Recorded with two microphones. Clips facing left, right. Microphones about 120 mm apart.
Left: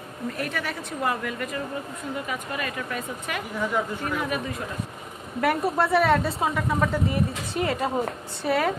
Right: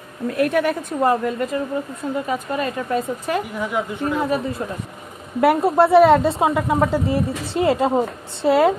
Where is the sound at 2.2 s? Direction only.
30° right (ahead or behind).